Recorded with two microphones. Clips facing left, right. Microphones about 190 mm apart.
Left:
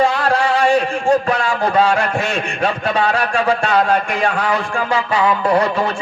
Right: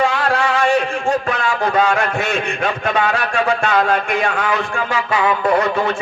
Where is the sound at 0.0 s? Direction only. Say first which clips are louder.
Left 2 dB; 35° left (ahead or behind).